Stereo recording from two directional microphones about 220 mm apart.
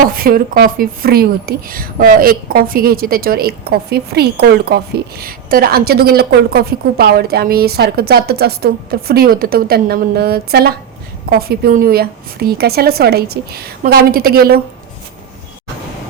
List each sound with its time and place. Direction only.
0.0 s a woman's voice: 40° right (ahead or behind)